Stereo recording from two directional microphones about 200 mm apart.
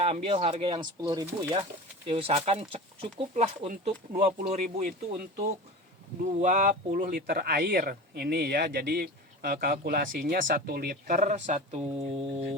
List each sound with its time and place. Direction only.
0.0 s speech: 30° right (ahead or behind)